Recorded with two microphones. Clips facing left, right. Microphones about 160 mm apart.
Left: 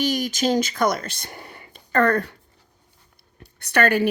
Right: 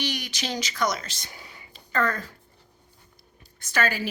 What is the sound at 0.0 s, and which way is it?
Speech, 45° left (ahead or behind).